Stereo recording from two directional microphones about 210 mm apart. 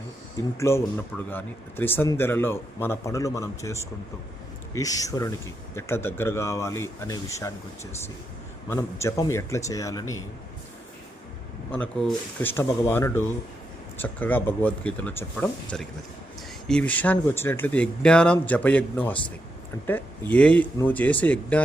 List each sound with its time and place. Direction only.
0.5 s speech: 15° left (ahead or behind)
8.7 s speech: 15° left (ahead or behind)
11.7 s speech: 5° left (ahead or behind)